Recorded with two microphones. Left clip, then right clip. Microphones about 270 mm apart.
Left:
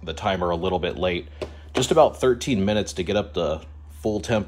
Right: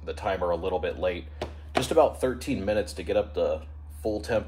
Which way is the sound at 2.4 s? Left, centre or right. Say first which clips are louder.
Left 3 dB; left.